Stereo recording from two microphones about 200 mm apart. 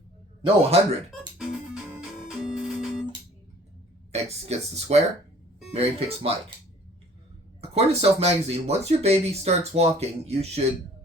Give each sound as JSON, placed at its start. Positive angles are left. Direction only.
{"t": 0.4, "sound": "speech", "side_deg": -30}
{"t": 1.4, "sound": "music", "side_deg": -5}
{"t": 4.1, "sound": "speech", "side_deg": -30}
{"t": 7.6, "sound": "speech", "side_deg": -30}